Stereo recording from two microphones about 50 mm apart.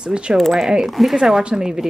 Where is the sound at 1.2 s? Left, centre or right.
Centre.